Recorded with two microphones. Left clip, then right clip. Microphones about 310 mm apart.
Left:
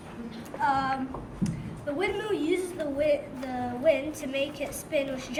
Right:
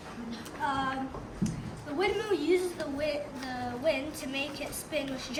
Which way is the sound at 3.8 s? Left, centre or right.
Centre.